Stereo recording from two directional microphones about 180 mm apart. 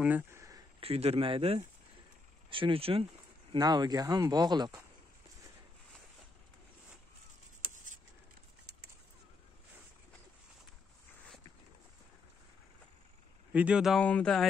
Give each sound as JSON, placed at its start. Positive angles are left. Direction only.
{"t": 0.0, "sound": "a sound", "side_deg": -10}
{"t": 0.7, "sound": "speech", "side_deg": -35}
{"t": 13.5, "sound": "speech", "side_deg": -5}